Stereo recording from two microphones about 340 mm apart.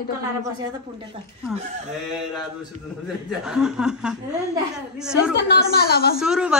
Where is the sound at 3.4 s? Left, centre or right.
Centre.